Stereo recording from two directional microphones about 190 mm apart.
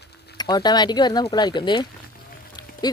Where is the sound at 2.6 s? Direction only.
20° left (ahead or behind).